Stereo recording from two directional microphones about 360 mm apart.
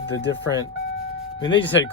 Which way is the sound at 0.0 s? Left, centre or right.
Left.